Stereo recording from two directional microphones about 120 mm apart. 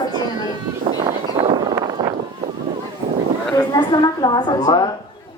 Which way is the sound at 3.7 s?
35° left (ahead or behind).